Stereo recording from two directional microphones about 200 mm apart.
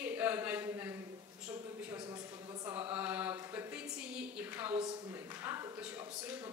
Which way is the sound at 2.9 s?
10° right (ahead or behind).